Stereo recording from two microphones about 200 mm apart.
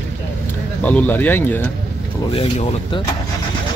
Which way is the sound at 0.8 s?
10° left (ahead or behind).